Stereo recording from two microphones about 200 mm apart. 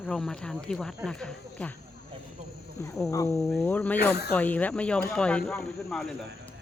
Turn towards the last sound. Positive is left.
turn(degrees=5)  # may be behind; listen again after turning